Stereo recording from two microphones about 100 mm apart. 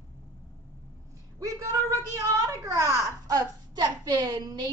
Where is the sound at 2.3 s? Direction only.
35° right (ahead or behind).